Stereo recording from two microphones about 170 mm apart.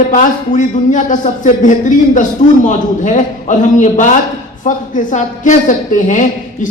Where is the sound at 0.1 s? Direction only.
45° left (ahead or behind).